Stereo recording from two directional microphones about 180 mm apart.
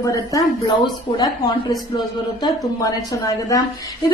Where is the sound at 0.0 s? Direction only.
20° left (ahead or behind).